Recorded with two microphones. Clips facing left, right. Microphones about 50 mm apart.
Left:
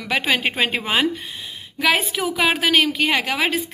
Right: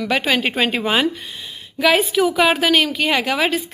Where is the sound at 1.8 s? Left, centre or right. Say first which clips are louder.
Right 4 dB; left.